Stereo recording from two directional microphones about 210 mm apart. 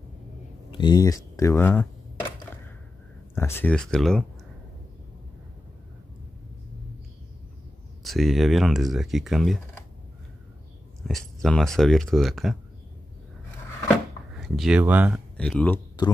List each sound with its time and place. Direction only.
0.7 s speech: 20° left (ahead or behind)
3.3 s speech: 10° left (ahead or behind)
8.0 s speech: centre (ahead or behind)
11.1 s speech: centre (ahead or behind)
13.8 s drawer open or close: centre (ahead or behind)
15.3 s speech: 5° left (ahead or behind)